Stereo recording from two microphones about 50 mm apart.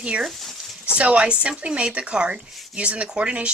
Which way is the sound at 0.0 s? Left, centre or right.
Right.